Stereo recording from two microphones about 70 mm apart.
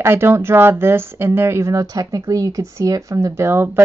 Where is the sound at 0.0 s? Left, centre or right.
Right.